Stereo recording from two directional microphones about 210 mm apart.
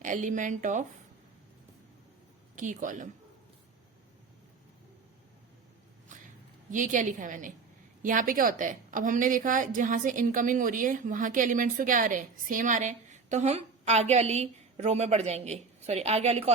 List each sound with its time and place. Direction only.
0.0 s a woman's voice: 35° right (ahead or behind)
2.6 s a woman's voice: 40° right (ahead or behind)
6.7 s a woman's voice: 40° right (ahead or behind)